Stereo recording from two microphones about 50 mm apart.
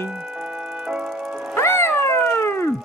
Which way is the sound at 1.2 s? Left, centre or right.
Centre.